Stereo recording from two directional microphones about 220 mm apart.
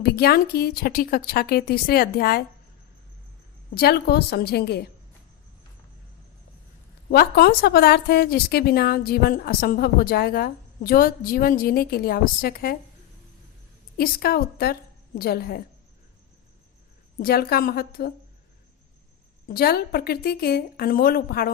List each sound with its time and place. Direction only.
0.0 s a woman's voice: 45° left (ahead or behind)
3.8 s a woman's voice: 45° left (ahead or behind)
7.1 s a woman's voice: 45° left (ahead or behind)
13.9 s a woman's voice: 45° left (ahead or behind)
17.2 s a woman's voice: 45° left (ahead or behind)
19.5 s a woman's voice: 45° left (ahead or behind)